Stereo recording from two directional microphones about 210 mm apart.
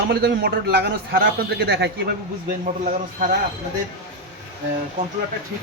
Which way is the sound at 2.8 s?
35° right (ahead or behind).